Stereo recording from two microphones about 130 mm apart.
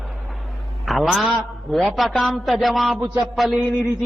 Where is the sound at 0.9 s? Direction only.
Centre (ahead or behind).